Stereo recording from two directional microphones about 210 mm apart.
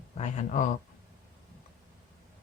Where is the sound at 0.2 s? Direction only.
35° left (ahead or behind).